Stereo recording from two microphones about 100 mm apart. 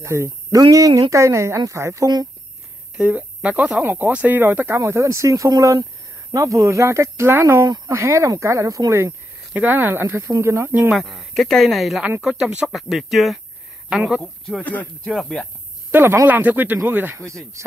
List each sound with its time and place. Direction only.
0.0 s speech: 30° right (ahead or behind)
3.0 s speech: 15° right (ahead or behind)
7.6 s speech: 45° right (ahead or behind)
7.9 s speech: 30° right (ahead or behind)
10.9 s speech: centre (ahead or behind)
14.6 s speech: 15° left (ahead or behind)
15.1 s speech: 5° left (ahead or behind)
15.9 s speech: 25° right (ahead or behind)